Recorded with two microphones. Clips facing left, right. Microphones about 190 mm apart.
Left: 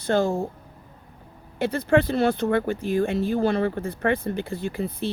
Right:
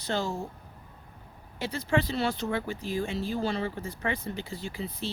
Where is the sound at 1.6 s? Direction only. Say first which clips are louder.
Left 8 dB; 55° left (ahead or behind).